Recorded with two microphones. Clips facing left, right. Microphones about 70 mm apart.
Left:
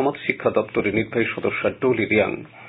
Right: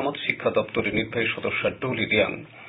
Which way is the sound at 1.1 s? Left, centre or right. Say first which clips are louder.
Left 4 dB; left.